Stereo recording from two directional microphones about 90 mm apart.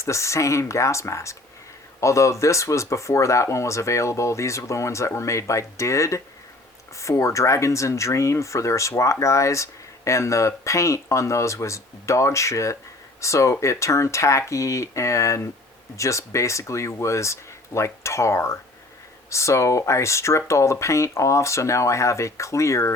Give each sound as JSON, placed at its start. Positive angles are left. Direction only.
{"t": 0.0, "sound": "speech", "side_deg": 35}